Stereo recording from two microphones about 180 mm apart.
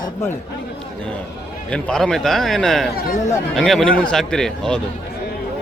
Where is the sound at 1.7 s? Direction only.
5° left (ahead or behind).